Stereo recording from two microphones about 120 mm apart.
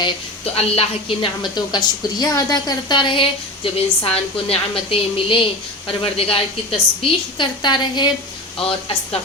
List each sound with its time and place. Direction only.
0.5 s a woman's voice: 55° left (ahead or behind); by 8.1 s 40° left (ahead or behind)